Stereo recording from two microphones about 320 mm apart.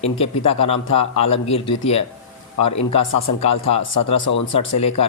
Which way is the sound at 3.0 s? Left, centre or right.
Left.